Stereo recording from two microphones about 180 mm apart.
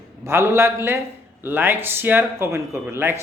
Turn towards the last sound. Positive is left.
turn(degrees=-15)  # may be behind; listen again after turning